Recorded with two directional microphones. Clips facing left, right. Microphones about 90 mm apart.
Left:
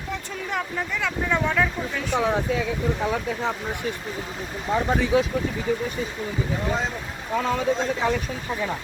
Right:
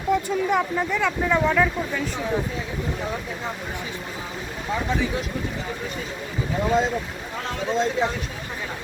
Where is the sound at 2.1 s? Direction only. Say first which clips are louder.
Left 4 dB; 75° left (ahead or behind).